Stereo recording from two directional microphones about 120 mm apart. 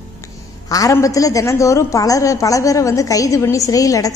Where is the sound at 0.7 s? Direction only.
30° left (ahead or behind).